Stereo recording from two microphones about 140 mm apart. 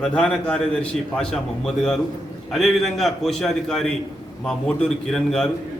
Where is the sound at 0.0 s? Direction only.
5° left (ahead or behind).